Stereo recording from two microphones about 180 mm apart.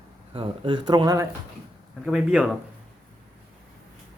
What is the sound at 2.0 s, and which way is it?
Speech, 5° right (ahead or behind).